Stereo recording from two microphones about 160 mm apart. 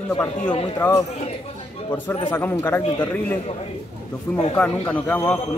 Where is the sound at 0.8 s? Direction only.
20° left (ahead or behind).